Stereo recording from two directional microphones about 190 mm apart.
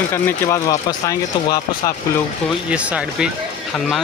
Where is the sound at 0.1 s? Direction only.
15° left (ahead or behind).